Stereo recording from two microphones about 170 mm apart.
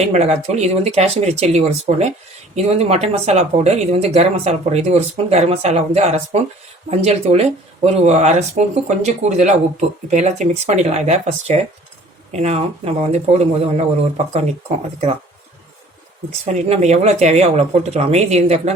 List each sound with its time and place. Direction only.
0.0 s speech: 40° right (ahead or behind)
16.5 s speech: 40° right (ahead or behind)